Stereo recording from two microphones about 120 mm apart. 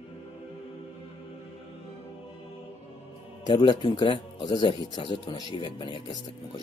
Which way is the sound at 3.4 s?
40° left (ahead or behind).